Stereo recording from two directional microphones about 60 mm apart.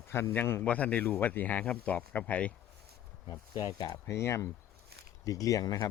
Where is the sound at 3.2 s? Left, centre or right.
Left.